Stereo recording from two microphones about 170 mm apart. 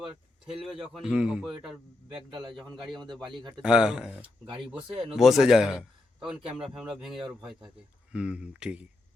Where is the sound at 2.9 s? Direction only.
25° right (ahead or behind).